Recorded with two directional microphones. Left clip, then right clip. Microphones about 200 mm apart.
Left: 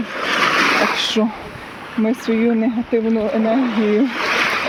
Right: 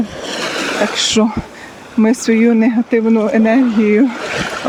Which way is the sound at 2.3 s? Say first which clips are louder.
Right 4 dB; 35° right (ahead or behind).